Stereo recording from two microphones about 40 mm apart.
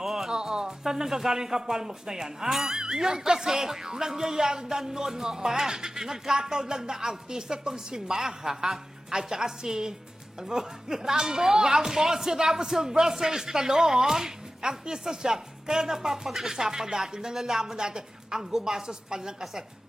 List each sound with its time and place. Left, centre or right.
0.0 s music: centre
0.3 s speech: centre